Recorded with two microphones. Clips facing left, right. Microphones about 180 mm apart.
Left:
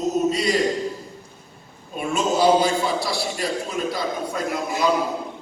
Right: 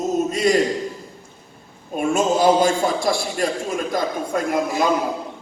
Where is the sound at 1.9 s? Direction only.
50° right (ahead or behind).